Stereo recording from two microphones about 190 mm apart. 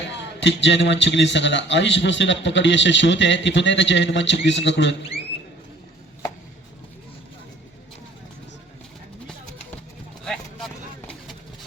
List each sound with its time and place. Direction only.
0.1 s a man's voice: 70° left (ahead or behind)